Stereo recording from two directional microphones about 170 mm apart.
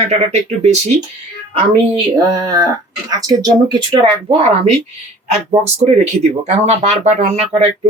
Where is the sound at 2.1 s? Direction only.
25° right (ahead or behind).